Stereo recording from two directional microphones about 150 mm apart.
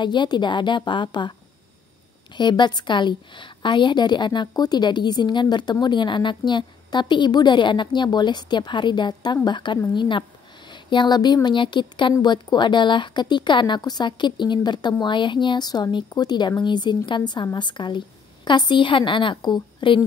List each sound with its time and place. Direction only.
0.0 s a woman's voice: 30° left (ahead or behind)
2.3 s a woman's voice: 30° left (ahead or behind)